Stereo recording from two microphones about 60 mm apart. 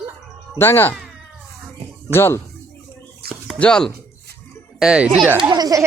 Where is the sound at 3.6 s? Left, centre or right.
Centre.